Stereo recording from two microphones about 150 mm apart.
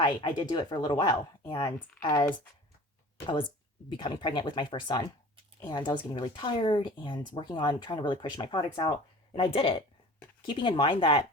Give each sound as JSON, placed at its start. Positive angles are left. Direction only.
{"t": 0.0, "sound": "speech", "side_deg": 30}
{"t": 3.8, "sound": "speech", "side_deg": 30}